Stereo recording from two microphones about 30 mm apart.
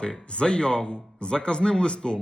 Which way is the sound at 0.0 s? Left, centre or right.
Left.